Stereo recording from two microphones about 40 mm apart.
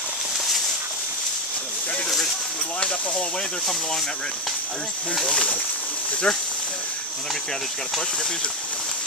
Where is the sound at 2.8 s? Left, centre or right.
Left.